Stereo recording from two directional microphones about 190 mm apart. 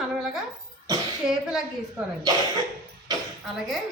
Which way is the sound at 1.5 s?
5° right (ahead or behind).